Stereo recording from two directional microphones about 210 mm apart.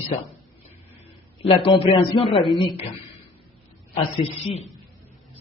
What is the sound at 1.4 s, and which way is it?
A man's voice, 25° left (ahead or behind).